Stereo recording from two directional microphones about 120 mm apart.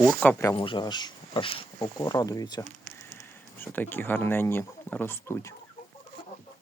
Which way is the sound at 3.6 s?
15° left (ahead or behind).